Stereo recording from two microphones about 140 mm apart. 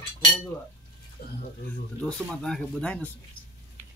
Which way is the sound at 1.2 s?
90° left.